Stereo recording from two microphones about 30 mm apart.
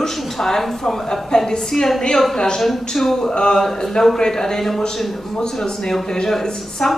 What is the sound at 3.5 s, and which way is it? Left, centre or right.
A woman's voice, centre.